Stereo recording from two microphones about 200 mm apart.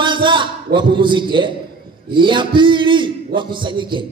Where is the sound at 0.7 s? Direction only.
25° right (ahead or behind).